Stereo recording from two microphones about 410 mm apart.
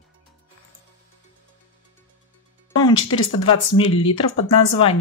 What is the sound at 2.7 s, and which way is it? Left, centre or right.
Music, left.